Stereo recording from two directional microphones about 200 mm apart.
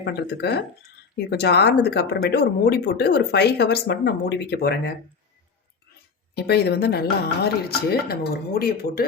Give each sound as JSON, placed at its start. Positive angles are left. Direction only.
{"t": 0.0, "sound": "speech", "side_deg": 55}
{"t": 6.3, "sound": "speech", "side_deg": 55}